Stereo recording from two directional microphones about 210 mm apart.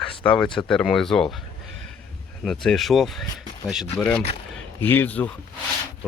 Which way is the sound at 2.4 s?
Centre (ahead or behind).